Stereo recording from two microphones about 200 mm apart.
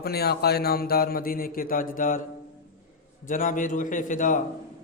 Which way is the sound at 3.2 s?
40° left (ahead or behind).